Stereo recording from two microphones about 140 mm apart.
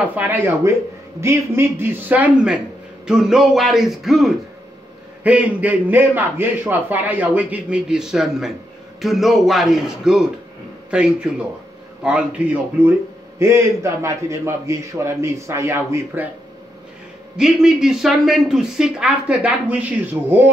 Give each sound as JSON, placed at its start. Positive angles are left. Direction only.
{"t": 0.1, "sound": "a man's voice", "side_deg": -10}
{"t": 13.4, "sound": "a man's voice", "side_deg": -20}
{"t": 17.4, "sound": "speech", "side_deg": -5}